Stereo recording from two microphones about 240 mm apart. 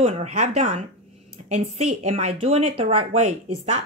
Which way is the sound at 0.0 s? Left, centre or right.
Right.